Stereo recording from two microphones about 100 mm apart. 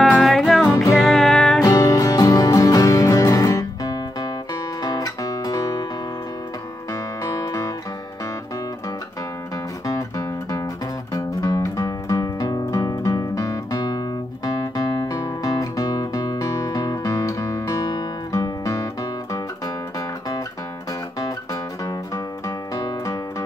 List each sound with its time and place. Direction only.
0.2 s music: centre (ahead or behind)
1.6 s music: 35° left (ahead or behind)
4.8 s guitar: 40° left (ahead or behind)
6.9 s music: 35° left (ahead or behind)
9.8 s music: 35° left (ahead or behind)
22.8 s music: 40° left (ahead or behind)